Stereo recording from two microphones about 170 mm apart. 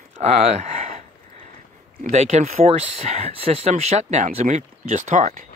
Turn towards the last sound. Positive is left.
turn(degrees=-45)  # may be behind; listen again after turning